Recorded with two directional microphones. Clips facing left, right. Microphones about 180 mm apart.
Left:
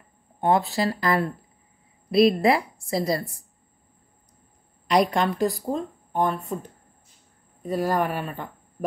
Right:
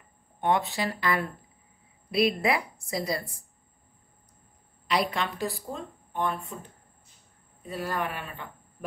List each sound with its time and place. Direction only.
0.4 s speech: 35° left (ahead or behind)
4.8 s speech: 45° left (ahead or behind)